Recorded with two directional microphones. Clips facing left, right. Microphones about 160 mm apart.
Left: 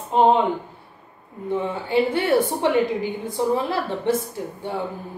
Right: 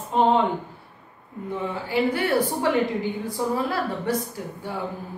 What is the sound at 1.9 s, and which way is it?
Speech, 25° left (ahead or behind).